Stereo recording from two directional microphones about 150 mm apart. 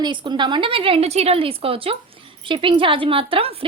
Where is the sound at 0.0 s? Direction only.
30° right (ahead or behind).